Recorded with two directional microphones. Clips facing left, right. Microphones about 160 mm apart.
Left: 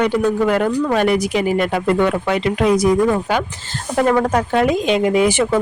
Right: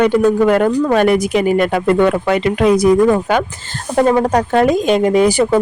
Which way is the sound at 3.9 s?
25° right (ahead or behind).